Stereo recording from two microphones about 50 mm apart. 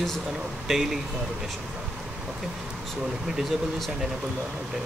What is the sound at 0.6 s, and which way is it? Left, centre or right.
Speech, centre.